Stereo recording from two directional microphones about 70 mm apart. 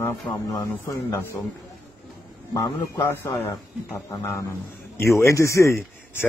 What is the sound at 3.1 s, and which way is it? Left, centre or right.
A man's voice, left.